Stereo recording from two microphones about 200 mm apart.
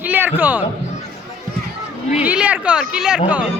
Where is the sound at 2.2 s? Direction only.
5° right (ahead or behind).